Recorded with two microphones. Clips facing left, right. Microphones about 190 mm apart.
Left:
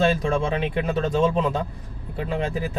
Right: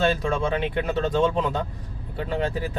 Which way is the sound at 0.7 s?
15° left (ahead or behind).